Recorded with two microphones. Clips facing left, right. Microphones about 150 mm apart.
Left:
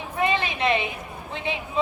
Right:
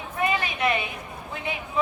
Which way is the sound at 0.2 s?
25° left (ahead or behind).